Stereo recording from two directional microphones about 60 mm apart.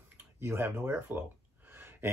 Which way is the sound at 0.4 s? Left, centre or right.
Right.